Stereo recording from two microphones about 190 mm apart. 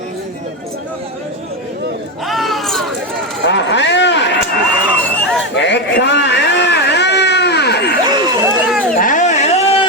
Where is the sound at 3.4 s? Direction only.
70° left (ahead or behind).